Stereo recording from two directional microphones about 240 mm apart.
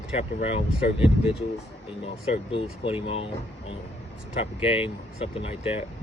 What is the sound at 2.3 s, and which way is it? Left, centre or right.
Speech, left.